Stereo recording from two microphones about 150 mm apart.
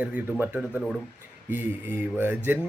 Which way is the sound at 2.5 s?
15° right (ahead or behind).